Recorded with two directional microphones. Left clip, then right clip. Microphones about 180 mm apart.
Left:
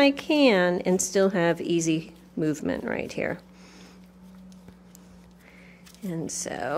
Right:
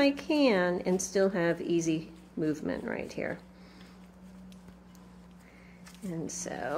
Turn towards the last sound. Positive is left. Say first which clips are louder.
# left 5 dB
turn(degrees=40)  # may be behind; listen again after turning